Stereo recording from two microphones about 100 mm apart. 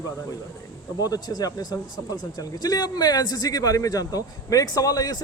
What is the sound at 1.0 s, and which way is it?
Speech, 40° left (ahead or behind).